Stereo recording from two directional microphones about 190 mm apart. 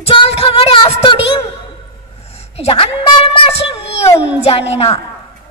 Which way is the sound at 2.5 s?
30° left (ahead or behind).